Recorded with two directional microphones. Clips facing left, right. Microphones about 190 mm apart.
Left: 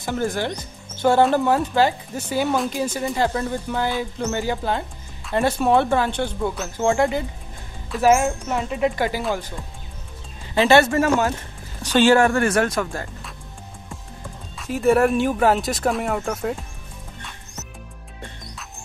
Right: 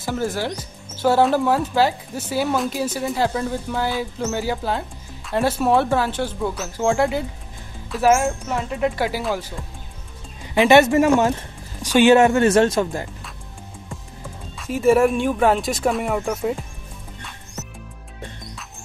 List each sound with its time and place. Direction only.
0.0 s speech: 5° right (ahead or behind)
10.5 s speech: 15° right (ahead or behind)
14.6 s speech: centre (ahead or behind)